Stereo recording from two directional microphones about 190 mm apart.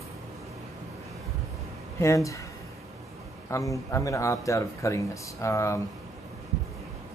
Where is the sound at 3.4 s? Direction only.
15° left (ahead or behind).